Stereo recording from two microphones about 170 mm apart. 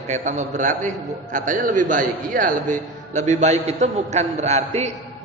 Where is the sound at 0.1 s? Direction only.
45° right (ahead or behind).